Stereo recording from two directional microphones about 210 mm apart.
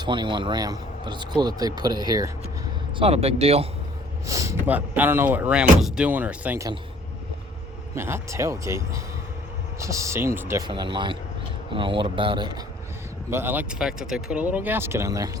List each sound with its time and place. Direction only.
0.0 s a man's voice: 20° right (ahead or behind)
3.0 s a man's voice: 30° right (ahead or behind)
4.3 s speech: 15° right (ahead or behind)
7.9 s speech: 10° right (ahead or behind)
10.7 s a man's voice: 25° right (ahead or behind)
13.3 s speech: 10° right (ahead or behind)